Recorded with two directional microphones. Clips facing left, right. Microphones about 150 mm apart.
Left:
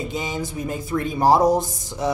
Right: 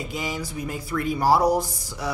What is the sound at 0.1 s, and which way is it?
A woman's voice, 20° left (ahead or behind).